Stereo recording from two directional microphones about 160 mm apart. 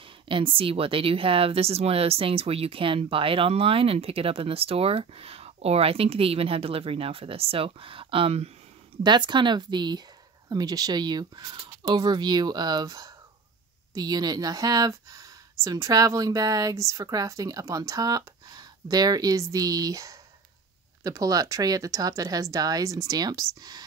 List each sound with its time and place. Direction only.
0.3 s speech: 35° right (ahead or behind)